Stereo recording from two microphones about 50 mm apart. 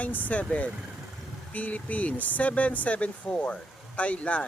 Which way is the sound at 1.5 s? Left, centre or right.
Left.